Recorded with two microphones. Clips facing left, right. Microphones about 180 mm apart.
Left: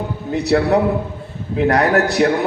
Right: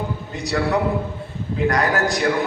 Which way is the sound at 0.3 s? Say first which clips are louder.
Left 8 dB; 65° left (ahead or behind).